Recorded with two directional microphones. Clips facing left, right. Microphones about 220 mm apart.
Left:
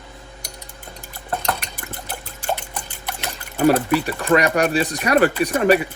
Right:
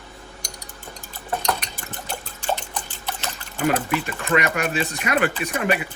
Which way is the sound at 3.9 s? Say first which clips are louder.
Left 5 dB; 35° left (ahead or behind).